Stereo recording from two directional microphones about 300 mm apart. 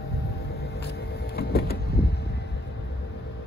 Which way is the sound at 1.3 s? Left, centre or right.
Left.